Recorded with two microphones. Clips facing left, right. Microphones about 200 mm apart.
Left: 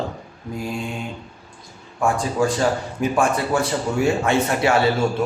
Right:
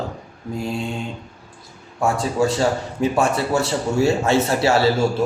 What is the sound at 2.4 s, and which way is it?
Speech, 25° right (ahead or behind).